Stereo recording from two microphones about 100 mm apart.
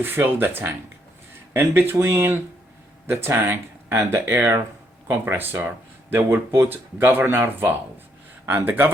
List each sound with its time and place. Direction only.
0.0 s speech: 20° right (ahead or behind)